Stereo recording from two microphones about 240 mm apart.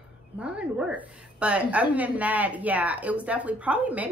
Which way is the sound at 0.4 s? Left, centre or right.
Centre.